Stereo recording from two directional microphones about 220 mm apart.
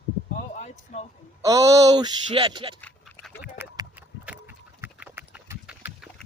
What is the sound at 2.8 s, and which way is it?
Dog, 10° left (ahead or behind).